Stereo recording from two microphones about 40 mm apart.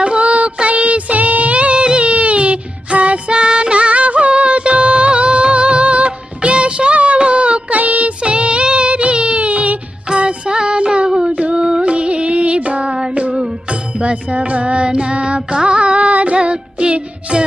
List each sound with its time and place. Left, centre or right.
0.0 s music: right
8.2 s child singing: right
10.2 s music: right
12.9 s child singing: centre
13.3 s music: centre
13.7 s music: right